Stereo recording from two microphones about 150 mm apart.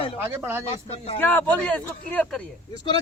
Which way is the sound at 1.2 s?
10° left (ahead or behind).